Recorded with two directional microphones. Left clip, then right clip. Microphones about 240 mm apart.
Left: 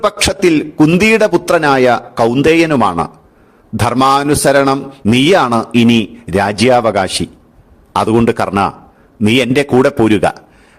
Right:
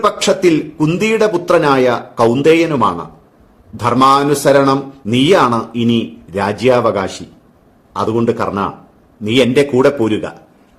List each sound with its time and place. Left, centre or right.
0.0 s a man's voice: left